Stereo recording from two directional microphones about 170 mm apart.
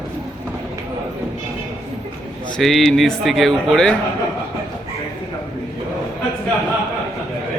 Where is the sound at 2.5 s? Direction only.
Centre (ahead or behind).